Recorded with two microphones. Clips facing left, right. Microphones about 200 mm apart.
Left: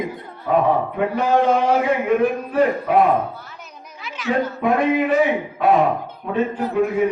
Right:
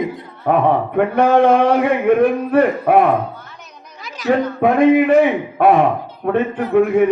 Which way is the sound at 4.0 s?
40° right (ahead or behind).